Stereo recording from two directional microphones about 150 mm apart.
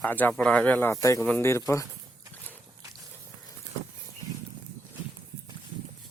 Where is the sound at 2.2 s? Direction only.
20° right (ahead or behind).